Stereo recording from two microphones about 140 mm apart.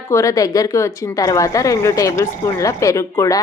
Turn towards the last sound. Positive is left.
turn(degrees=20)  # may be behind; listen again after turning